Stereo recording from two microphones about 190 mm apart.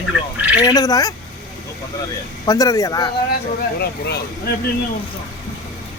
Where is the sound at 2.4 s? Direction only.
20° left (ahead or behind).